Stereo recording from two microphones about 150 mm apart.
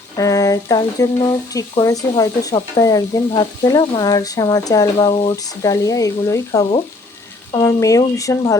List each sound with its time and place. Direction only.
0.2 s speech: 25° left (ahead or behind)